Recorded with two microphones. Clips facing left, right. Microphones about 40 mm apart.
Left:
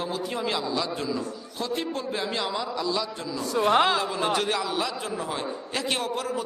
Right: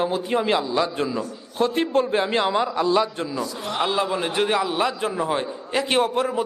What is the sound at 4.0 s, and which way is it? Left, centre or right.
A man's voice, right.